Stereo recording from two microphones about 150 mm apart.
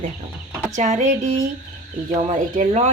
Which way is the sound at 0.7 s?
50° right (ahead or behind).